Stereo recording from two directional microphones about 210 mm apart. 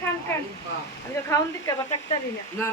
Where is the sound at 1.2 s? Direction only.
15° left (ahead or behind).